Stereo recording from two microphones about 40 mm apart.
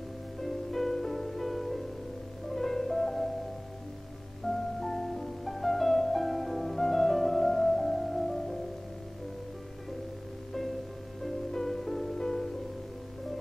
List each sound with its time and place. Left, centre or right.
0.4 s music: centre
4.5 s music: centre
11.2 s music: centre